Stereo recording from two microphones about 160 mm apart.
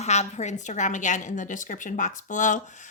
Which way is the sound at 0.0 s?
45° left (ahead or behind).